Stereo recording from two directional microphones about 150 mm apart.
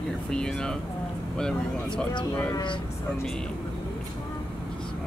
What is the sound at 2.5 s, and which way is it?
Speech, 30° left (ahead or behind).